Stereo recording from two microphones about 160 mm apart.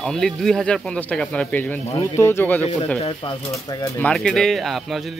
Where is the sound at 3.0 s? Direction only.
30° left (ahead or behind).